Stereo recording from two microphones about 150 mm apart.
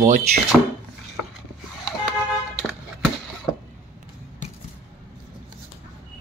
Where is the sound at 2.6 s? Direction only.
Centre (ahead or behind).